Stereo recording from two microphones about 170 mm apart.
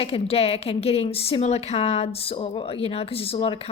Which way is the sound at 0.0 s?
35° left (ahead or behind).